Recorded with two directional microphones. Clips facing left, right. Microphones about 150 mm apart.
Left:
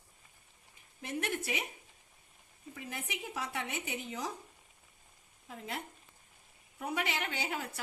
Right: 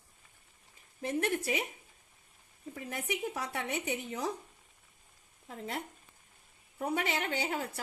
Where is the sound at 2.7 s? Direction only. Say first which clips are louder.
Right 5 dB; 35° right (ahead or behind).